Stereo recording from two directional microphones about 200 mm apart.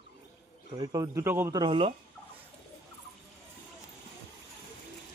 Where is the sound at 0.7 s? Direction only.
20° right (ahead or behind).